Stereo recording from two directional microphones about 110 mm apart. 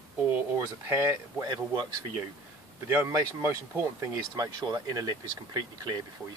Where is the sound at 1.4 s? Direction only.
40° right (ahead or behind).